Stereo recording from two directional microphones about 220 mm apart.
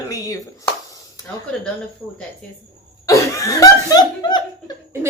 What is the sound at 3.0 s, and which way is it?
A woman's voice, 15° left (ahead or behind).